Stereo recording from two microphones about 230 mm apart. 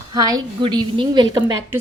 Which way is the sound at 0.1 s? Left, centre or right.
Centre.